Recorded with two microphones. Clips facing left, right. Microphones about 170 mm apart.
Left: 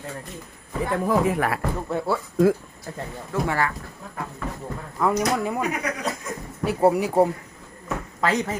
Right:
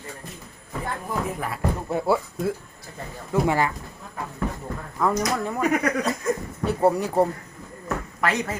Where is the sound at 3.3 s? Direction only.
15° right (ahead or behind).